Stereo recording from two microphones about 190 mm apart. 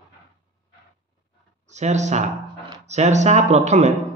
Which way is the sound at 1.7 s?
40° right (ahead or behind).